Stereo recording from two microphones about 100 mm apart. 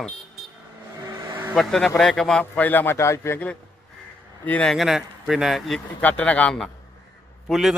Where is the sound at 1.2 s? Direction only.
25° right (ahead or behind).